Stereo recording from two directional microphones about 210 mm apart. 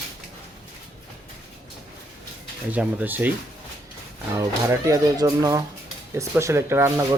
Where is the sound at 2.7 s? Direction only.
5° right (ahead or behind).